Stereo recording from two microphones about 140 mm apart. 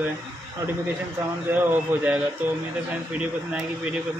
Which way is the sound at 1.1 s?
15° right (ahead or behind).